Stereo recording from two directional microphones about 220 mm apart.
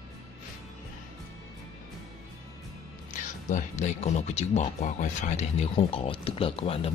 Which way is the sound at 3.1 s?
35° left (ahead or behind).